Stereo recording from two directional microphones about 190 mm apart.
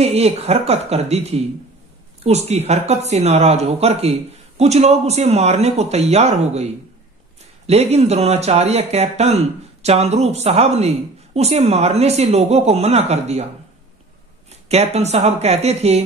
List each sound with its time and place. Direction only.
0.0 s speech: 30° right (ahead or behind)
14.5 s speech: 35° right (ahead or behind)